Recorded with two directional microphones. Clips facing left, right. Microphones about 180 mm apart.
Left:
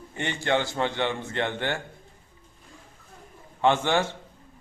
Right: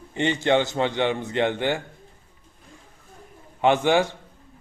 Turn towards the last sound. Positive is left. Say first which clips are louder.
# right 4 dB
turn(degrees=-15)  # may be behind; listen again after turning